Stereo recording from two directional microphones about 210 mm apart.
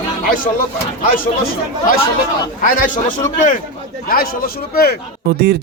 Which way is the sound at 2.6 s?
40° left (ahead or behind).